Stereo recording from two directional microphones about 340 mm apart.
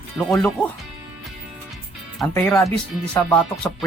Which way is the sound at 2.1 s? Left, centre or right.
Centre.